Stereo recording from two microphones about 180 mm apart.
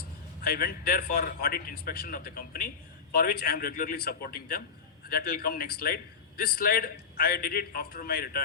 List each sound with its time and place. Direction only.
0.4 s a man's voice: 55° left (ahead or behind)